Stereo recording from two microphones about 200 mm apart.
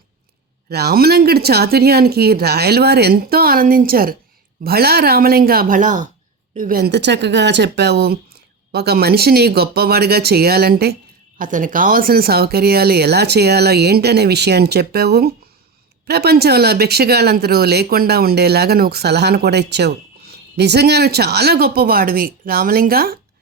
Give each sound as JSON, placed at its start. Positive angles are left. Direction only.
{"t": 0.7, "sound": "speech", "side_deg": -55}
{"t": 11.3, "sound": "speech", "side_deg": -40}